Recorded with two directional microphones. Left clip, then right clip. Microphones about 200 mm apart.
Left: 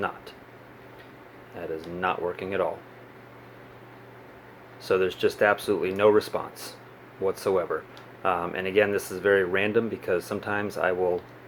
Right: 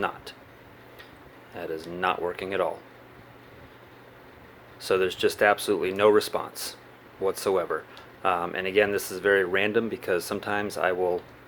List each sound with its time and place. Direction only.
1.5 s speech: 20° right (ahead or behind)
4.8 s speech: 15° right (ahead or behind)